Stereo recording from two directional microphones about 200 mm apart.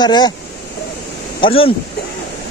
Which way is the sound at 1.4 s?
30° left (ahead or behind).